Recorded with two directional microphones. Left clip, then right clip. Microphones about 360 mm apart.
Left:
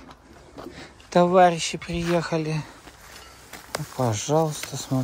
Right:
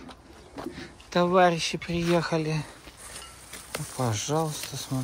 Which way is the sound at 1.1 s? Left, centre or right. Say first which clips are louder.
Left 4 dB; centre.